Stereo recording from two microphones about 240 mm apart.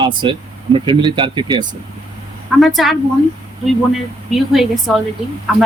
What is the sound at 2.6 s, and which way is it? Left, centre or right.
Speech, centre.